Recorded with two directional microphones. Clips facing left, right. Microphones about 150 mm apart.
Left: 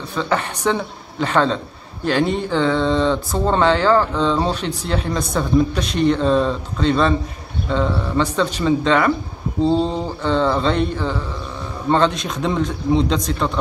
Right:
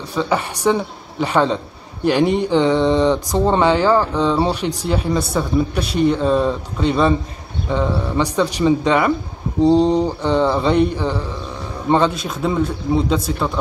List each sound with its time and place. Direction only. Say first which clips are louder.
0.1 s speech: right 2 dB; 10° right (ahead or behind)